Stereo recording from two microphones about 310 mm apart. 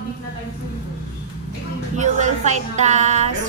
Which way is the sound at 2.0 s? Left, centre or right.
Right.